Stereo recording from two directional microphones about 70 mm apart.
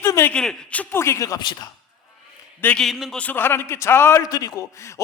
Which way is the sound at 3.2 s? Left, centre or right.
Left.